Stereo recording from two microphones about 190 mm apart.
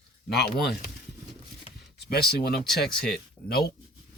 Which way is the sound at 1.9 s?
60° left (ahead or behind).